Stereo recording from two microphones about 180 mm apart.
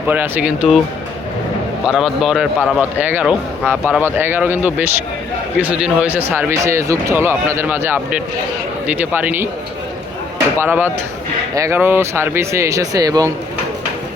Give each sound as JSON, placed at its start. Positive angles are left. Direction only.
{"t": 0.1, "sound": "speech", "side_deg": -10}
{"t": 1.9, "sound": "a man's voice", "side_deg": 0}
{"t": 10.6, "sound": "speech", "side_deg": -10}